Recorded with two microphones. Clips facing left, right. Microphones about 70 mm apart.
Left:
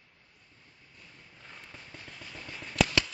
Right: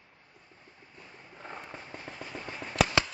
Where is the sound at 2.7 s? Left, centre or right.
Right.